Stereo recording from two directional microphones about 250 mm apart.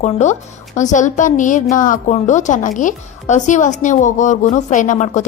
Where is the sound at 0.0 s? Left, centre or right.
Left.